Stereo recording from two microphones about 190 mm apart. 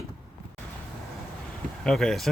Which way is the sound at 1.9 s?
Centre (ahead or behind).